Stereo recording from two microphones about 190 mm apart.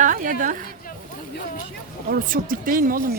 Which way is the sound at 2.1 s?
45° right (ahead or behind).